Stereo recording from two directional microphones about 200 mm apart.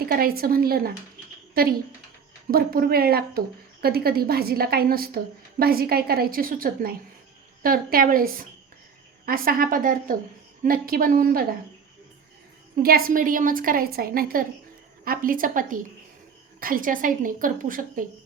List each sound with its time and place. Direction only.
0.0 s a woman's voice: 45° right (ahead or behind)
2.5 s a woman's voice: 45° right (ahead or behind)
12.7 s a woman's voice: 45° right (ahead or behind)